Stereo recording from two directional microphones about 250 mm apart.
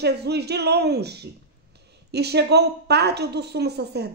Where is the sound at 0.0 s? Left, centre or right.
Right.